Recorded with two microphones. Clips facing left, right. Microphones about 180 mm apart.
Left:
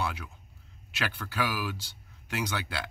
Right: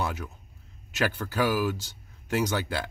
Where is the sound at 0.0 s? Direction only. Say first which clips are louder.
Right 3 dB; 45° right (ahead or behind).